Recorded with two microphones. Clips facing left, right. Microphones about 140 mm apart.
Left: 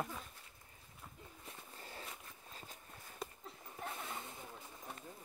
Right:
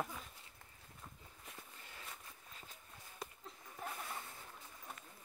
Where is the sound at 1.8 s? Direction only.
35° left (ahead or behind).